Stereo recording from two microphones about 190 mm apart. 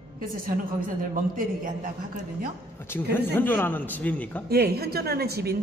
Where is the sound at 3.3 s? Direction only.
10° left (ahead or behind).